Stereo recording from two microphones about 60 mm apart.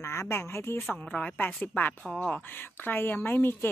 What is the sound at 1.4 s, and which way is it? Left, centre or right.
Speech, left.